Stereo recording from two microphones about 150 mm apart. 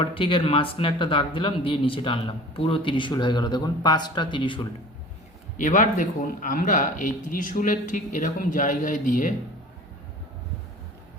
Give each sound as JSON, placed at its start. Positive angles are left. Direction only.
{"t": 0.0, "sound": "speech", "side_deg": 35}
{"t": 5.5, "sound": "speech", "side_deg": 55}